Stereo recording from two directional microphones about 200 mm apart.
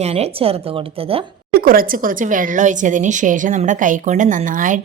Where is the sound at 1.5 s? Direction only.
45° right (ahead or behind).